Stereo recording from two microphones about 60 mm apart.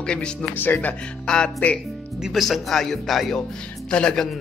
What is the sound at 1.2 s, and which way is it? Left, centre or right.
Speech, centre.